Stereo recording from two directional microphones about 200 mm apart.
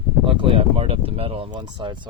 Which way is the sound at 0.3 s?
25° right (ahead or behind).